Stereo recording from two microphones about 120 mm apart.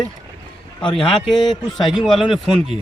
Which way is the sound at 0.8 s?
45° left (ahead or behind).